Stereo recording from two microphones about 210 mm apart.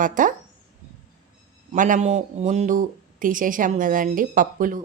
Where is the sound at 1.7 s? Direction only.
40° right (ahead or behind).